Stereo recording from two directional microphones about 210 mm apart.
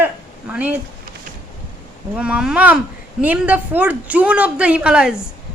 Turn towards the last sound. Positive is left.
turn(degrees=-5)  # may be behind; listen again after turning